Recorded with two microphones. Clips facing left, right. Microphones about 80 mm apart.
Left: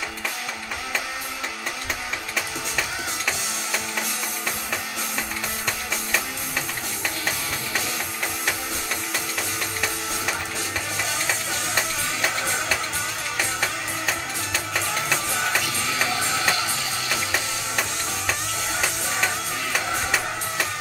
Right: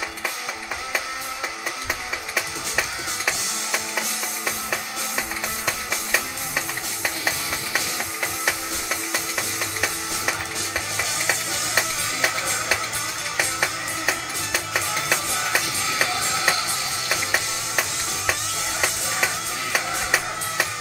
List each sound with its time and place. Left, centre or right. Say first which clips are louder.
11.0 s music: right 1 dB; centre
13.4 s music: right 2 dB; centre